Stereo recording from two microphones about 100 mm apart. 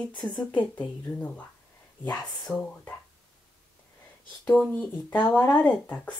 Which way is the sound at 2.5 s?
10° left (ahead or behind).